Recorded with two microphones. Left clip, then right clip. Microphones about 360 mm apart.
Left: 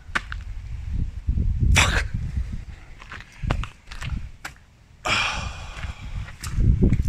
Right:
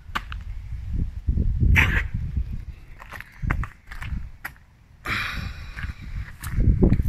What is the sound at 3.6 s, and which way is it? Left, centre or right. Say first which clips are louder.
Walk: left 1 dB; centre.